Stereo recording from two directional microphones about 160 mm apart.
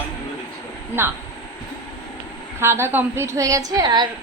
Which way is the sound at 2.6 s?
15° right (ahead or behind).